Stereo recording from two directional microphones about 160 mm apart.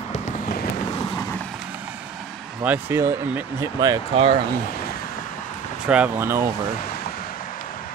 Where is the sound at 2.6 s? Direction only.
10° right (ahead or behind).